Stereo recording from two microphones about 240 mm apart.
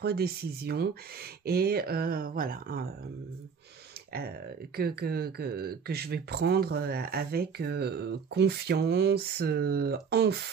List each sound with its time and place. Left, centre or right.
0.0 s speech: right
4.7 s speech: right